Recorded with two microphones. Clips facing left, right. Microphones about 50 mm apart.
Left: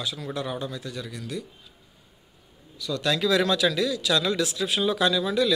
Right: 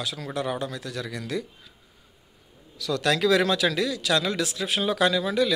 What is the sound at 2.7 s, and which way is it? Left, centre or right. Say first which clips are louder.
Speech: right 2 dB; right.